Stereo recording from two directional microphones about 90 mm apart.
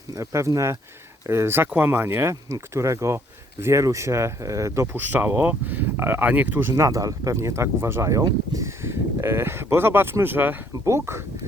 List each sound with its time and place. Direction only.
0.1 s speech: 35° right (ahead or behind)
4.9 s speech: 20° right (ahead or behind)